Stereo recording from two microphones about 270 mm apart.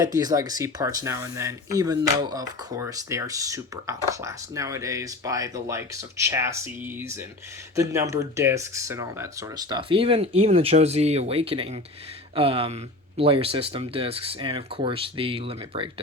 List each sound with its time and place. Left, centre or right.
0.0 s speech: centre